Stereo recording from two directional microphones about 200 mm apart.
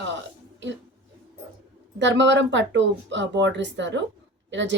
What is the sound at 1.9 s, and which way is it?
Speech, 65° right (ahead or behind).